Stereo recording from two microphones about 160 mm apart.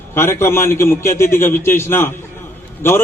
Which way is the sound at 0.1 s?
15° left (ahead or behind).